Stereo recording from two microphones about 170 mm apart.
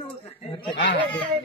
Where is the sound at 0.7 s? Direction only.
90° left.